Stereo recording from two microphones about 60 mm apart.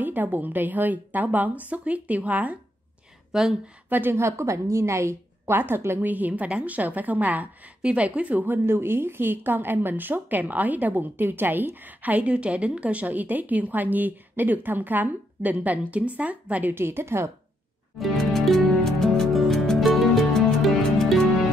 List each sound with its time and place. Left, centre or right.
0.0 s speech: right
3.3 s speech: centre
3.9 s a woman's voice: right
4.2 s a woman's voice: right
5.5 s a woman's voice: right
8.6 s speech: right
16.7 s a woman's voice: right
17.9 s music: centre